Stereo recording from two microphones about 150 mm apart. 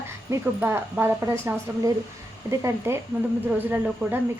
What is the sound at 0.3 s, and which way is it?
A woman's voice, 15° right (ahead or behind).